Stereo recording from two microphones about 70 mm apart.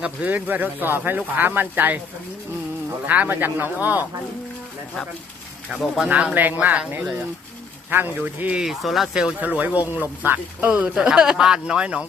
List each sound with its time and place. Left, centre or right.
0.0 s speech: centre
3.1 s speech: right
6.1 s speech: centre
8.6 s speech: centre
9.4 s speech: right